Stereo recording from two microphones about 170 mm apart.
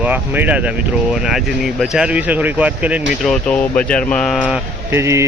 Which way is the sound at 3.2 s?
5° left (ahead or behind).